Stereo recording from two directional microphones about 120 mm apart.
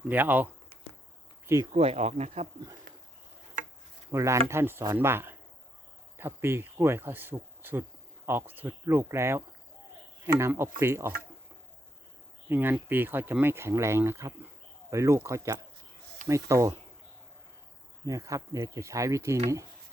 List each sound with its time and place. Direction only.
0.1 s speech: 15° right (ahead or behind)
1.7 s speech: 60° right (ahead or behind)
4.1 s speech: 25° right (ahead or behind)
12.5 s speech: 15° right (ahead or behind)
18.0 s speech: 25° right (ahead or behind)